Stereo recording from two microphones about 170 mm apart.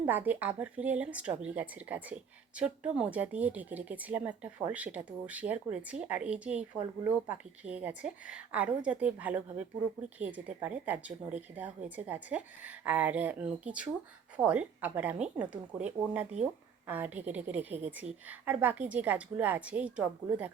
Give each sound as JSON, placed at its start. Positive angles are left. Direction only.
{"t": 0.0, "sound": "speech", "side_deg": -10}
{"t": 6.7, "sound": "speech", "side_deg": -20}